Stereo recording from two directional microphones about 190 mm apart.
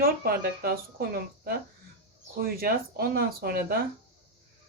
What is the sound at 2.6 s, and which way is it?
Speech, 55° right (ahead or behind).